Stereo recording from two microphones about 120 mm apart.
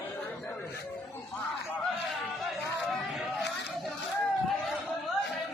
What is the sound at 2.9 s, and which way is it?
Chatter, centre (ahead or behind).